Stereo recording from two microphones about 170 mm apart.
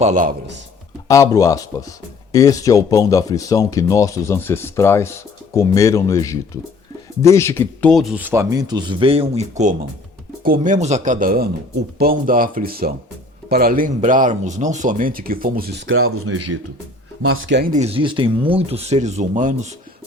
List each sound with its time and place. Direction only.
0.0 s speech: 50° right (ahead or behind)
1.0 s speech: 20° left (ahead or behind); by 15.8 s 60° right (ahead or behind)
17.4 s speech: 90° right
17.7 s speech: 40° right (ahead or behind)